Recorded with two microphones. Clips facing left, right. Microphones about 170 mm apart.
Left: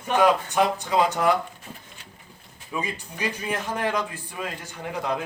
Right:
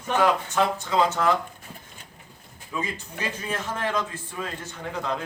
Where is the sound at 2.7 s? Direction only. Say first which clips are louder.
Left 1 dB; 15° left (ahead or behind).